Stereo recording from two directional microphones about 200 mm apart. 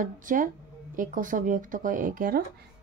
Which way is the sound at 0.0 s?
40° right (ahead or behind).